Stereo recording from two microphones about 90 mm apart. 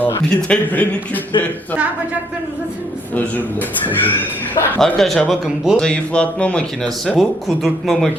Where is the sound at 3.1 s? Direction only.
20° left (ahead or behind).